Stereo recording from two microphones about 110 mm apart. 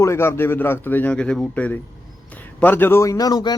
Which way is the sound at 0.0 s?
25° left (ahead or behind).